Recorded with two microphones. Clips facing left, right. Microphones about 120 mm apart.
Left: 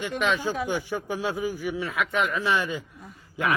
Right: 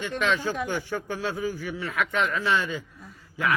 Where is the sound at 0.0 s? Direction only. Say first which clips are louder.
Even; 15° left (ahead or behind).